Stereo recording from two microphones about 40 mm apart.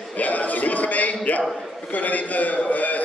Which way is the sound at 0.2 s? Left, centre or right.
Left.